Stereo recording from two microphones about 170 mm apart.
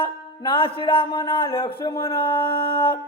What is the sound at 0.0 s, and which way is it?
Music, 30° left (ahead or behind).